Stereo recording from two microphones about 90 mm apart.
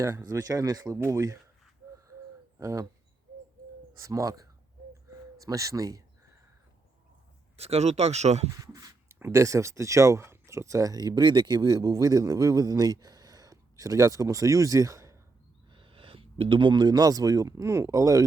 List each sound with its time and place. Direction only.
0.2 s speech: 45° right (ahead or behind)
0.9 s speech: 35° right (ahead or behind)
2.6 s speech: 35° right (ahead or behind)
3.9 s speech: 35° right (ahead or behind)
5.0 s a sound: 40° right (ahead or behind)
7.6 s speech: 90° right
8.5 s a sound: 35° right (ahead or behind)
9.3 s speech: 35° right (ahead or behind)
15.7 s speech: 75° right (ahead or behind); by 18.2 s 40° right (ahead or behind)